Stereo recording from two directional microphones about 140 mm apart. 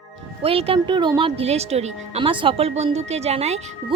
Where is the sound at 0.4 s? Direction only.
40° right (ahead or behind).